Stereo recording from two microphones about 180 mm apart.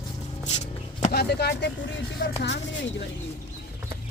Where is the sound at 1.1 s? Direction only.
65° left (ahead or behind).